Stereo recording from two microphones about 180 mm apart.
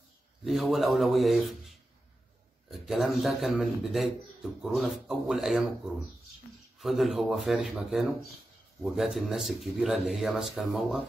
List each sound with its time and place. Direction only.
0.5 s a man's voice: centre (ahead or behind)
6.8 s a man's voice: centre (ahead or behind)